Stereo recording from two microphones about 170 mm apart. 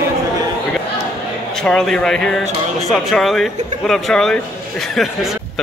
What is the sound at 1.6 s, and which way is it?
Speech, 5° left (ahead or behind).